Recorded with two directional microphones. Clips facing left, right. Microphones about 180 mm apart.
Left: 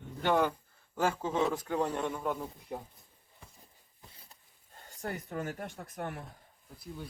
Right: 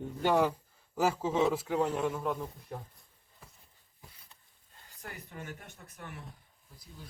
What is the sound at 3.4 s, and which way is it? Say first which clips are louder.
Walk: even; 5° right (ahead or behind).